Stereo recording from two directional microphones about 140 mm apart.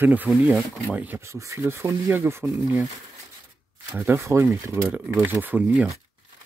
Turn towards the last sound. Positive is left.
turn(degrees=-10)  # may be behind; listen again after turning